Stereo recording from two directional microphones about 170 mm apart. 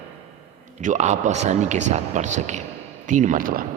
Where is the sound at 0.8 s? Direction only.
45° right (ahead or behind).